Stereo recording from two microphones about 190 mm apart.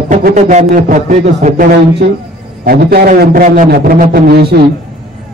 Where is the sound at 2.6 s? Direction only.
55° right (ahead or behind).